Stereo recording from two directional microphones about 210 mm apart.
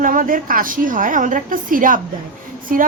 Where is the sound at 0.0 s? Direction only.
40° right (ahead or behind).